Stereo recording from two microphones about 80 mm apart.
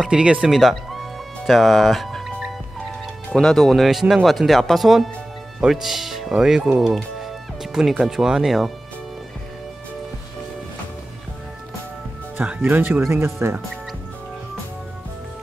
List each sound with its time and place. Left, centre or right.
0.0 s speech: centre
0.5 s music: centre
3.3 s speech: centre
8.0 s speech: centre
12.4 s speech: right
13.1 s speech: right